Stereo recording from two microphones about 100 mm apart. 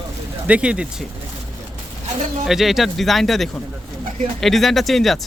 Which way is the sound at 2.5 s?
Centre (ahead or behind).